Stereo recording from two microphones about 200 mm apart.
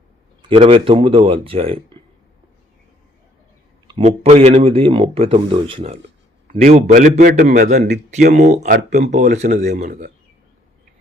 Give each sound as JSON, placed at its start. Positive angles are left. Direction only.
{"t": 0.4, "sound": "speech", "side_deg": -30}
{"t": 3.8, "sound": "a man's voice", "side_deg": -30}